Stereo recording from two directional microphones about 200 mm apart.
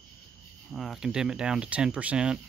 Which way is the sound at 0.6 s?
Centre (ahead or behind).